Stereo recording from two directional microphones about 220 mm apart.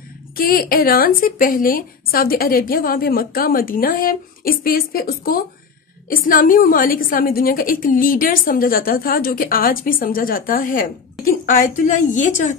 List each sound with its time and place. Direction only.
0.4 s a woman's voice: 40° left (ahead or behind)